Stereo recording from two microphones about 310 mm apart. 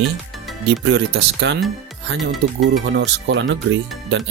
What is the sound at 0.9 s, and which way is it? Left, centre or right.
Speech, right.